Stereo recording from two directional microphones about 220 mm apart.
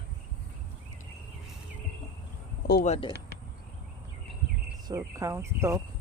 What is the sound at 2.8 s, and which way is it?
Speech, 30° left (ahead or behind).